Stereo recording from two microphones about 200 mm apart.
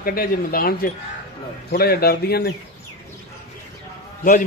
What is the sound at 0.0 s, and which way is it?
Speech, 45° left (ahead or behind).